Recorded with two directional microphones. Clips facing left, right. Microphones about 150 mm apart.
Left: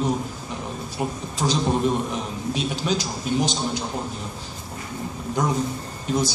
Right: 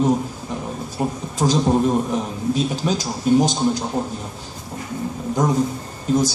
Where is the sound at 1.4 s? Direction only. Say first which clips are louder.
Right 4 dB; 45° right (ahead or behind).